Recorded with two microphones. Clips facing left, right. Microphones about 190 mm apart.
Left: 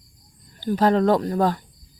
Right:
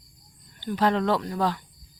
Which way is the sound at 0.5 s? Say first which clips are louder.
Left 5 dB; 40° left (ahead or behind).